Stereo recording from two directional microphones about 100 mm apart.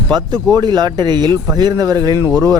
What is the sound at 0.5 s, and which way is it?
Speech, 45° right (ahead or behind).